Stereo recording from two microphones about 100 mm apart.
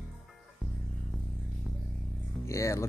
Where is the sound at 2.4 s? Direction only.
30° left (ahead or behind).